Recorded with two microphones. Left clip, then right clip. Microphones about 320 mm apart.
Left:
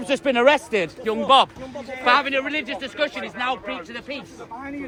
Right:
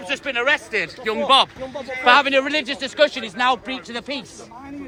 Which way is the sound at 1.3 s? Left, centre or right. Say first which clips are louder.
Even; centre.